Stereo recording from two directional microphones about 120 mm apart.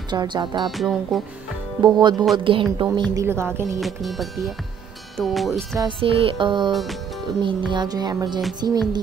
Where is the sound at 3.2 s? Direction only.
20° right (ahead or behind).